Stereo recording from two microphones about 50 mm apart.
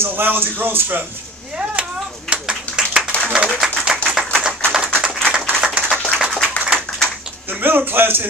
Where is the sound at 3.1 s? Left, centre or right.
Left.